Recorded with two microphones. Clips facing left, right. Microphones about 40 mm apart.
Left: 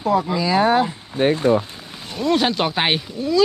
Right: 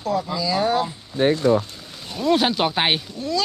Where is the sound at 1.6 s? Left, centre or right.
Left.